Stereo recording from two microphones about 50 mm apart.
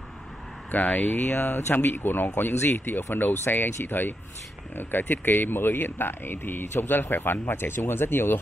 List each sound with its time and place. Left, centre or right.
0.7 s speech: left
2.5 s speech: left